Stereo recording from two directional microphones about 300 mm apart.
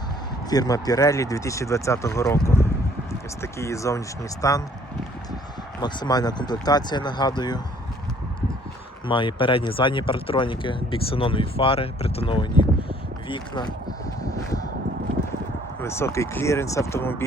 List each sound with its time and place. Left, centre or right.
0.5 s speech: centre
5.8 s speech: centre
9.0 s speech: centre
14.2 s a sound: centre
15.8 s speech: centre